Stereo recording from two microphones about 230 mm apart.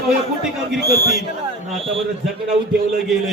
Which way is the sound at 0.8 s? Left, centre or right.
Right.